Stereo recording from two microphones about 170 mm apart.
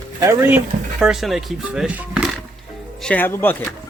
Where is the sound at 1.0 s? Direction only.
Centre (ahead or behind).